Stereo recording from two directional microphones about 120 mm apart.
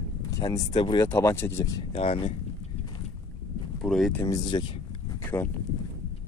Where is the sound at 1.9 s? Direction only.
50° left (ahead or behind).